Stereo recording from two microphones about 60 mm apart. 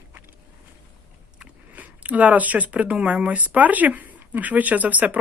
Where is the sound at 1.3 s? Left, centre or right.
Right.